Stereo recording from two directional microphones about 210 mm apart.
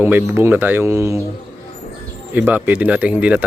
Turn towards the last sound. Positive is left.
turn(degrees=-5)  # may be behind; listen again after turning